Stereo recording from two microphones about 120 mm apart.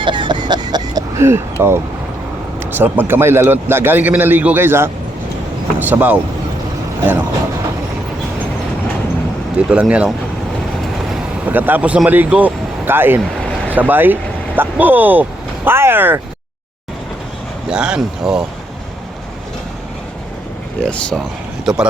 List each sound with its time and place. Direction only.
0.0 s vehicle: 40° right (ahead or behind); by 1.8 s 20° right (ahead or behind)
2.6 s a man's voice: 15° right (ahead or behind)
9.6 s a man's voice: 10° right (ahead or behind)
11.4 s speech: 15° right (ahead or behind)
17.7 s speech: 5° right (ahead or behind)
20.8 s speech: 5° left (ahead or behind)